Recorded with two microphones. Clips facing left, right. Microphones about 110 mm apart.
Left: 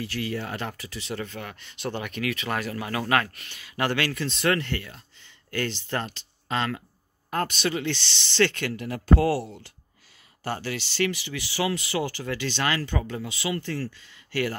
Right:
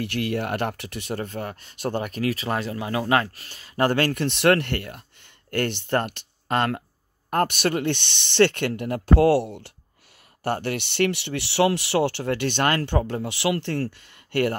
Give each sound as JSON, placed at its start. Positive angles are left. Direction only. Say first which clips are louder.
{"t": 0.0, "sound": "speech", "louder": "right 5 dB", "side_deg": -65}
{"t": 3.4, "sound": "speech", "louder": "right 5 dB", "side_deg": -40}
{"t": 13.4, "sound": "speech", "louder": "right 5 dB", "side_deg": -70}